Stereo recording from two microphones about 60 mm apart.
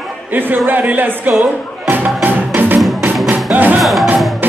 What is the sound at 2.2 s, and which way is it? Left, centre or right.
Music, right.